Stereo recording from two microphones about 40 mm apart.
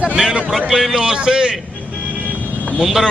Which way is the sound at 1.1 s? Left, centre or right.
Centre.